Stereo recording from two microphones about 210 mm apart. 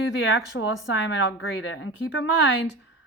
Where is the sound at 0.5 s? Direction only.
60° left (ahead or behind).